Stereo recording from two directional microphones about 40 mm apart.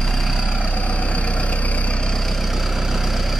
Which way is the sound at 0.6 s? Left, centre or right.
Left.